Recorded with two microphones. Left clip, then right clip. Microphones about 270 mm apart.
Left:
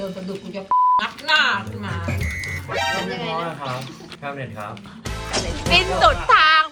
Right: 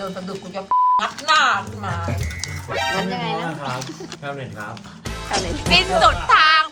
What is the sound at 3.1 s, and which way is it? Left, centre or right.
Speech, right.